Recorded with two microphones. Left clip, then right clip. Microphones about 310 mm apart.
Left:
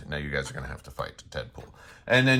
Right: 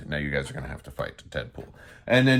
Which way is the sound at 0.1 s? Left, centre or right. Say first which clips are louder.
Right 2 dB; centre.